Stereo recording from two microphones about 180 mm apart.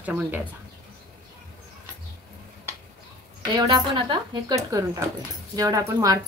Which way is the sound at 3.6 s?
25° right (ahead or behind).